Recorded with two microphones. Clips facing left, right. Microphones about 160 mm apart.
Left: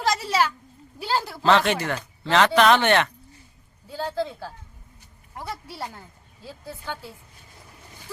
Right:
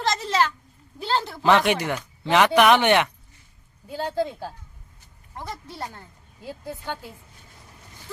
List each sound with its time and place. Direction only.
0.0 s a sound: 10° left (ahead or behind)
0.9 s speech: 10° left (ahead or behind)
1.4 s speech: 15° right (ahead or behind)
5.4 s speech: 5° left (ahead or behind)
6.4 s speech: 15° right (ahead or behind)